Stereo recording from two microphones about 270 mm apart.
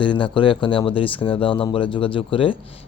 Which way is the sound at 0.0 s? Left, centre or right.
Centre.